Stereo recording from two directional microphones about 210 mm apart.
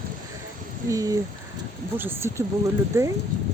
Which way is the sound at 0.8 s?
15° right (ahead or behind).